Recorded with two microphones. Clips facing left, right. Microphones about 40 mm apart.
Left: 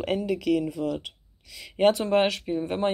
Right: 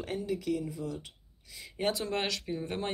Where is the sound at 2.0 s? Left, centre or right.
Left.